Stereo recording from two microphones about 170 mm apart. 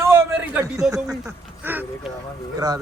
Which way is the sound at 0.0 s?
15° right (ahead or behind).